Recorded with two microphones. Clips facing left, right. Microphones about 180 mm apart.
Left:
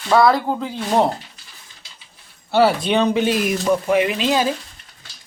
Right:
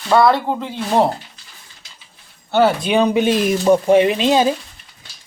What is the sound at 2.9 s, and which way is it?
Speech, 15° right (ahead or behind).